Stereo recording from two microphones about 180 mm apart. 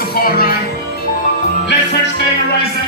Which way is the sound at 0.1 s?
55° left (ahead or behind).